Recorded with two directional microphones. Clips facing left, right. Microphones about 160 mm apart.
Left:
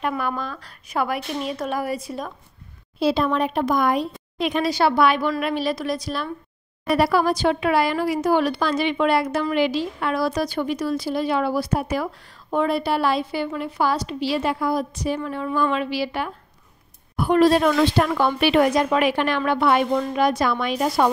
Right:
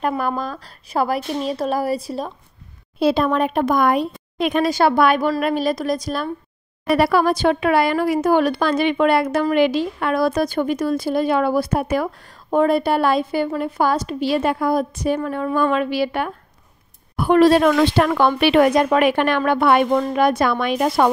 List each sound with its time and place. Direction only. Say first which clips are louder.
0.0 s speech: right 4 dB; 35° right (ahead or behind)
3.0 s a woman's voice: right 3 dB; 55° right (ahead or behind)
7.0 s a woman's voice: right 2 dB; 60° right (ahead or behind)
17.2 s speech: right 3 dB; 70° right (ahead or behind)